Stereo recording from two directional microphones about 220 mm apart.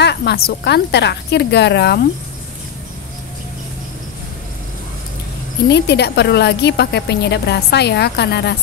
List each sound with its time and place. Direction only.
0.0 s a woman's voice: 50° left (ahead or behind)
5.7 s a woman's voice: 50° left (ahead or behind)